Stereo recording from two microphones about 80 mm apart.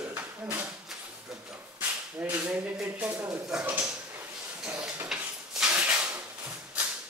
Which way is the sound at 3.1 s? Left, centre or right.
Right.